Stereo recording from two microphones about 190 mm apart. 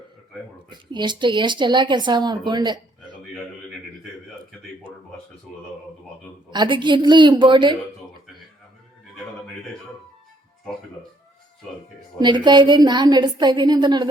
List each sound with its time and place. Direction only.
0.7 s speech: 25° right (ahead or behind)
6.5 s speech: 25° right (ahead or behind)
12.2 s speech: 25° right (ahead or behind)